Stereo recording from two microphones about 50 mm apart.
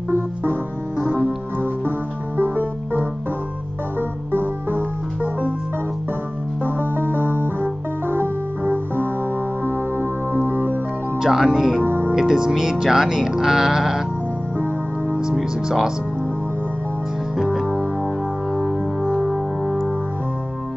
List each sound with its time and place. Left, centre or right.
0.1 s music: right
0.9 s keyboard: right
2.3 s music: right
4.6 s music: right
6.6 s music: right
11.1 s music: centre
11.8 s music: right
12.2 s speech: centre
15.3 s speech: centre
18.5 s music: centre